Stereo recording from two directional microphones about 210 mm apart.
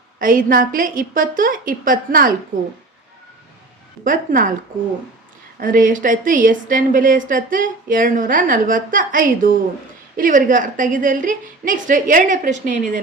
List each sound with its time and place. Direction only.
0.2 s a woman's voice: 40° right (ahead or behind)
4.0 s a woman's voice: 40° right (ahead or behind)
5.5 s a woman's voice: 40° right (ahead or behind)